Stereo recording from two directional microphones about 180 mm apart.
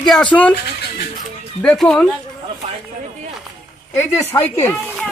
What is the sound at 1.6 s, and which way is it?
Speech, 5° left (ahead or behind).